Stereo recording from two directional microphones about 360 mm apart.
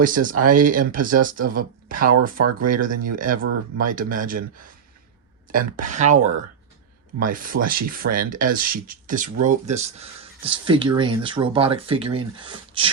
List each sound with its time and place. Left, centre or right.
0.0 s speech: right
2.4 s speech: right
2.6 s speech: right